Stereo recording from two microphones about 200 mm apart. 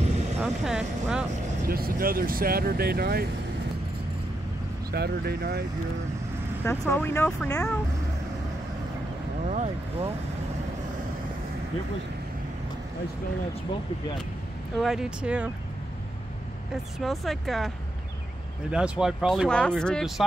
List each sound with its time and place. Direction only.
0.4 s speech: 5° right (ahead or behind)
1.7 s speech: 45° right (ahead or behind)
4.9 s speech: 55° right (ahead or behind)
6.6 s speech: 10° left (ahead or behind)
9.5 s speech: 30° right (ahead or behind)
14.8 s speech: centre (ahead or behind)
17.0 s speech: centre (ahead or behind)